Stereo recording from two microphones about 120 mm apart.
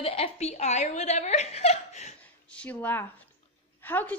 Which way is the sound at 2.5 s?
10° left (ahead or behind).